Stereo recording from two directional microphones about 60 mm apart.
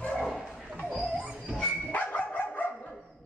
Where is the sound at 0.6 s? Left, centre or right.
Centre.